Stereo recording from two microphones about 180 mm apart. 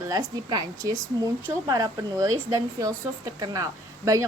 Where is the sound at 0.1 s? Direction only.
20° right (ahead or behind).